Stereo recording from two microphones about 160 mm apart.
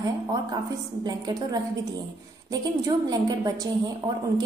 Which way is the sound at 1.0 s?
25° right (ahead or behind).